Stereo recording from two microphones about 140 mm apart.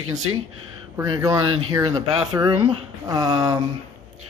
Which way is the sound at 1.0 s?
25° right (ahead or behind).